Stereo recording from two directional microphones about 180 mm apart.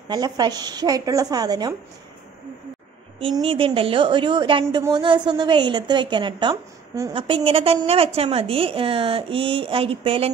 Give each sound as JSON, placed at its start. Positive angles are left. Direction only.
{"t": 0.1, "sound": "a woman's voice", "side_deg": -20}
{"t": 3.2, "sound": "a woman's voice", "side_deg": -30}